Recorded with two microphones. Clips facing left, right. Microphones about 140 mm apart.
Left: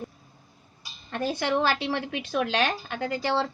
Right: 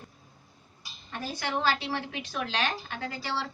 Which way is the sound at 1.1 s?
65° left (ahead or behind).